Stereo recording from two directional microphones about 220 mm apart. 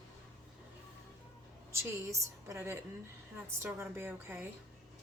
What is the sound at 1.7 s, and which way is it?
A woman's voice, 15° right (ahead or behind).